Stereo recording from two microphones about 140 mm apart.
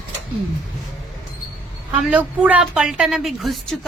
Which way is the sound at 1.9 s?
10° right (ahead or behind).